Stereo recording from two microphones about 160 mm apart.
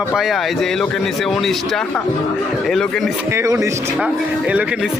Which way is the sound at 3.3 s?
20° right (ahead or behind).